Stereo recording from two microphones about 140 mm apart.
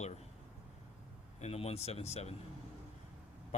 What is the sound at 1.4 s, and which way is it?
Speech, 45° left (ahead or behind).